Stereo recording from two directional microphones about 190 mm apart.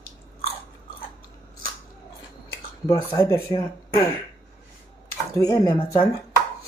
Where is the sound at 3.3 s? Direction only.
15° left (ahead or behind).